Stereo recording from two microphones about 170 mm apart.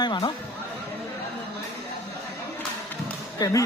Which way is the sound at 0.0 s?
25° left (ahead or behind).